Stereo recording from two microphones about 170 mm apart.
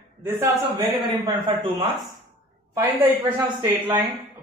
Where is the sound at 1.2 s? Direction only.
30° right (ahead or behind).